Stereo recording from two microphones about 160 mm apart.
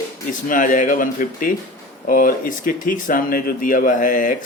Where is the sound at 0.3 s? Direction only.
55° left (ahead or behind).